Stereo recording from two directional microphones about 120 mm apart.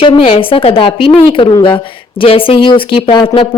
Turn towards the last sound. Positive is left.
turn(degrees=40)  # may be behind; listen again after turning